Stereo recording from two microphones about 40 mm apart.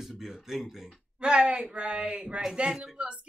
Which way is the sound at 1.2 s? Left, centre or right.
Right.